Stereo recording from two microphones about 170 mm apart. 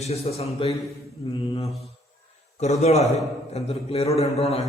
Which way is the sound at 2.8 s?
40° left (ahead or behind).